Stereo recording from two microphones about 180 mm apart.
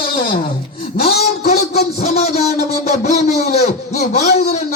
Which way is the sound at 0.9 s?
60° left (ahead or behind).